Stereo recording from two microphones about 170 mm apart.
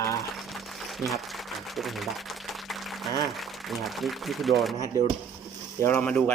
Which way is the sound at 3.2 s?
Centre (ahead or behind).